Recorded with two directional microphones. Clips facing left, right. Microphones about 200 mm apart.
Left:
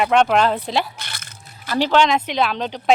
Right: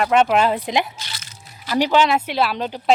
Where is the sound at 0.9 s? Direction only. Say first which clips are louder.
Even; 55° left (ahead or behind).